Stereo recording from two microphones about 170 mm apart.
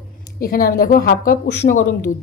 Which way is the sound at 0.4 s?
60° left (ahead or behind).